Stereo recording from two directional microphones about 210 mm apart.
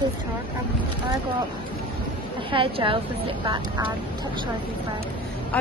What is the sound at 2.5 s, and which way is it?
A woman's voice, 25° right (ahead or behind).